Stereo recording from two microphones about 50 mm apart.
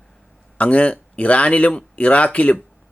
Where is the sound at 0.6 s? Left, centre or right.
Left.